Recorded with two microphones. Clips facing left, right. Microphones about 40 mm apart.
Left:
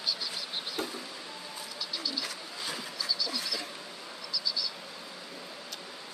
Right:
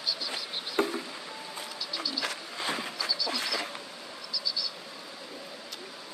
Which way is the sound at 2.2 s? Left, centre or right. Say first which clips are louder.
Right 5 dB; right.